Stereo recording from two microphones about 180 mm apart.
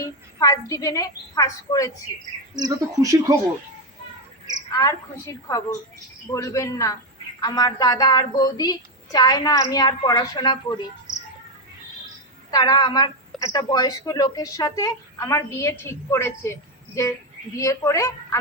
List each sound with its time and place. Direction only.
0.0 s a woman's voice: 20° left (ahead or behind)
2.6 s speech: 20° right (ahead or behind)
4.8 s a woman's voice: 20° left (ahead or behind)
12.5 s a woman's voice: 20° left (ahead or behind)